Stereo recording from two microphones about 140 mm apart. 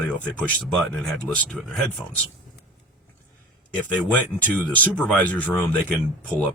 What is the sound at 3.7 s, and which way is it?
Speech, 10° left (ahead or behind).